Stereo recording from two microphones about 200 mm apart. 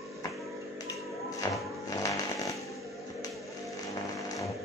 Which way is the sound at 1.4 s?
15° left (ahead or behind).